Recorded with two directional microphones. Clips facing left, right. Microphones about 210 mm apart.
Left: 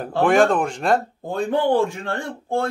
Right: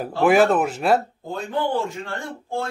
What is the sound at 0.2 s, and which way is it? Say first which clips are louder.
Speech: even; 5° right (ahead or behind).